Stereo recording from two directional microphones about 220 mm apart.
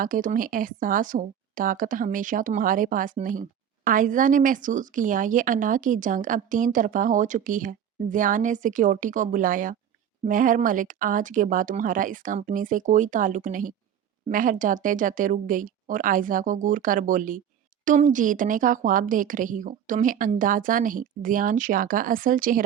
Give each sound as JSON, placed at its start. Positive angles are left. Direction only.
{"t": 0.0, "sound": "speech", "side_deg": -35}